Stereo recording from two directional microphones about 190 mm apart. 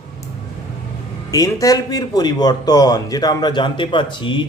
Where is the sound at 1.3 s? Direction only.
20° left (ahead or behind).